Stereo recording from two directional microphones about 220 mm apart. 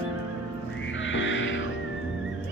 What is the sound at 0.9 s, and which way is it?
Music, 60° left (ahead or behind).